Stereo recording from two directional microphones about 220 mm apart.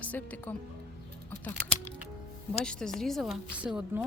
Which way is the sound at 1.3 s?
5° left (ahead or behind).